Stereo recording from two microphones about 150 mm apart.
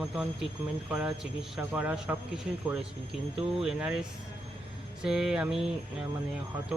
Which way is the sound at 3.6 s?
5° right (ahead or behind).